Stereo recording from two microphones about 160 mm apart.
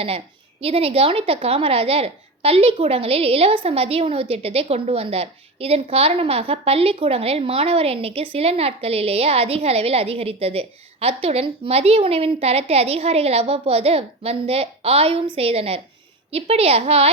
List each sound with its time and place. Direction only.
0.6 s a woman's voice: 35° right (ahead or behind)